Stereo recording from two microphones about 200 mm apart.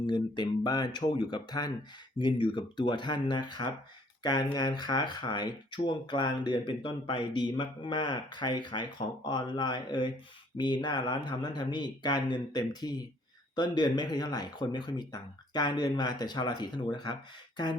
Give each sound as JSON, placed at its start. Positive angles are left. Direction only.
{"t": 0.0, "sound": "speech", "side_deg": 20}